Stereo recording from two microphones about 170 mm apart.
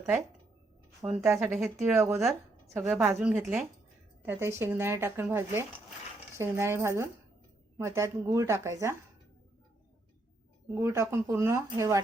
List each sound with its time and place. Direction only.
1.0 s a woman's voice: 5° right (ahead or behind)
2.0 s a woman's voice: centre (ahead or behind); by 9.0 s 15° right (ahead or behind)
10.8 s speech: 15° right (ahead or behind)